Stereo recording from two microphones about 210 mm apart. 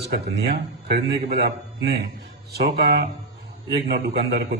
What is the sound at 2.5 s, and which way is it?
A man's voice, 45° right (ahead or behind).